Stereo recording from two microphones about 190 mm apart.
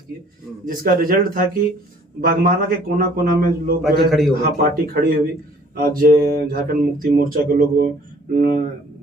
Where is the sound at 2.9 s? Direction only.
50° right (ahead or behind).